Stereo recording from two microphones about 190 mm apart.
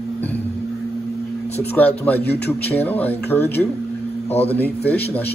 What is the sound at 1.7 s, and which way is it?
A man's voice, 10° left (ahead or behind).